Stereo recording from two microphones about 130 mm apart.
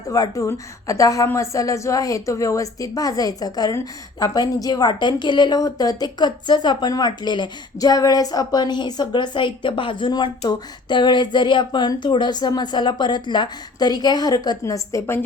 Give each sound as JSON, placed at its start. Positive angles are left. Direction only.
{"t": 0.1, "sound": "a woman's voice", "side_deg": 25}